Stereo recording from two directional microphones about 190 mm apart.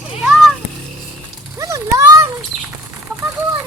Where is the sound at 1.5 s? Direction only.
15° right (ahead or behind).